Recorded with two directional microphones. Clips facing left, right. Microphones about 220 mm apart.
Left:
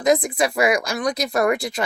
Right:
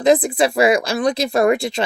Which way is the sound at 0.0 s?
30° right (ahead or behind).